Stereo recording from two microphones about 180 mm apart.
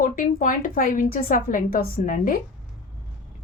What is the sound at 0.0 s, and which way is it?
A woman's voice, 50° left (ahead or behind).